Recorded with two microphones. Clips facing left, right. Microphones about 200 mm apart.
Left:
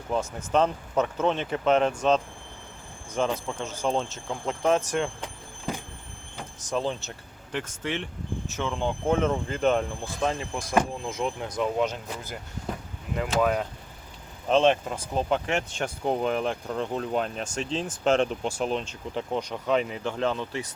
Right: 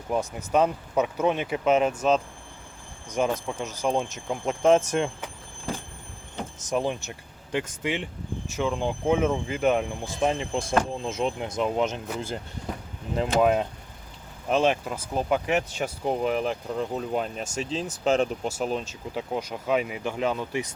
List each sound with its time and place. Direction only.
0.1 s speech: 10° right (ahead or behind)
6.7 s speech: 15° right (ahead or behind)
10.2 s speech: 20° right (ahead or behind)
14.5 s speech: 5° right (ahead or behind)